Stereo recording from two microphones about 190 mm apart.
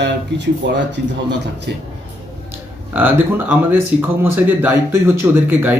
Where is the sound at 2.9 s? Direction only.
10° right (ahead or behind).